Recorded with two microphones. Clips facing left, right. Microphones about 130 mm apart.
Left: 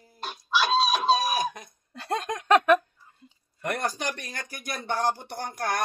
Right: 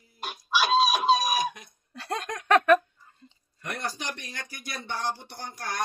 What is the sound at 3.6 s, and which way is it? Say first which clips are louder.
Speech: left 5 dB; 50° left (ahead or behind).